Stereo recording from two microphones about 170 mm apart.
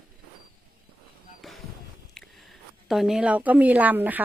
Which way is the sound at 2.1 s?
Centre (ahead or behind).